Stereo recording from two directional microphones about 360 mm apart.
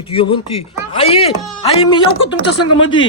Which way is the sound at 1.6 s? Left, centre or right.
Centre.